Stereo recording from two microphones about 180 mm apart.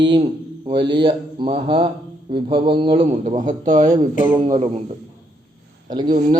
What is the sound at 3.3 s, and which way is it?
Speech, 45° right (ahead or behind).